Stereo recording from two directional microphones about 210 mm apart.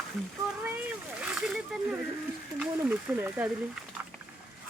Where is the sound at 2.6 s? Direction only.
10° right (ahead or behind).